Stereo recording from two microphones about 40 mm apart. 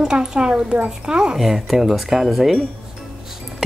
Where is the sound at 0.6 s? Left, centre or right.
Right.